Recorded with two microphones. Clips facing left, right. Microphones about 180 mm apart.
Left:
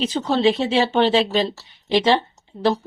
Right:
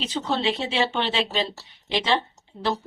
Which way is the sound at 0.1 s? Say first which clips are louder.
Left 4 dB; 40° left (ahead or behind).